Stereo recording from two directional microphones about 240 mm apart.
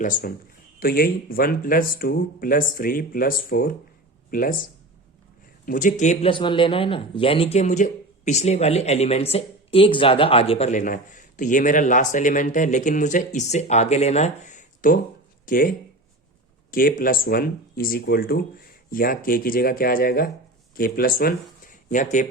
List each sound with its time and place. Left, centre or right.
0.0 s speech: left
5.6 s speech: left
16.7 s speech: left